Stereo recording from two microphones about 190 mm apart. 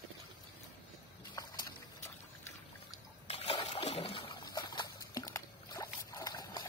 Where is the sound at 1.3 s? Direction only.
20° left (ahead or behind).